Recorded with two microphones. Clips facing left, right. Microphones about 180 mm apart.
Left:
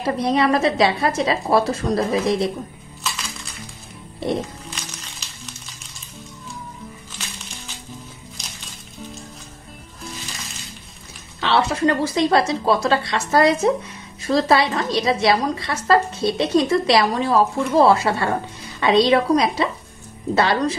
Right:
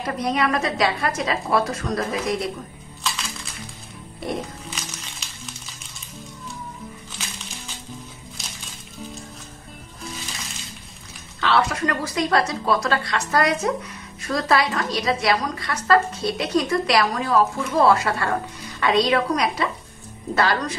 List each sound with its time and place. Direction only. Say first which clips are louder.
0.0 s a woman's voice: left 4 dB; 30° left (ahead or behind)
3.0 s music: even; centre (ahead or behind)
10.0 s music: even; centre (ahead or behind)
11.4 s a woman's voice: left 3 dB; 25° left (ahead or behind)